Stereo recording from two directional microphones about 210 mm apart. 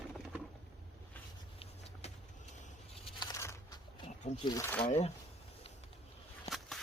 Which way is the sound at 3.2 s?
15° left (ahead or behind).